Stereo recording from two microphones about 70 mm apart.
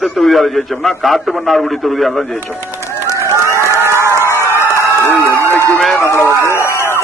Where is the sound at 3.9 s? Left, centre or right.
Right.